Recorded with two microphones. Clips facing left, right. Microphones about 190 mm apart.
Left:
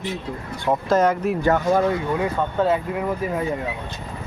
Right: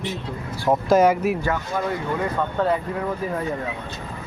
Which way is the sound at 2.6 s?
5° left (ahead or behind).